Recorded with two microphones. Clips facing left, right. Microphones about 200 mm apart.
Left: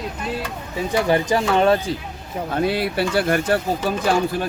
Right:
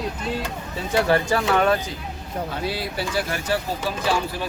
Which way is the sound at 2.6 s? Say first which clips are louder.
Left 6 dB; 60° left (ahead or behind).